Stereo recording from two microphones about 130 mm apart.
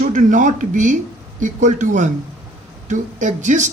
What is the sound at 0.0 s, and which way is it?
A man's voice, 75° right (ahead or behind).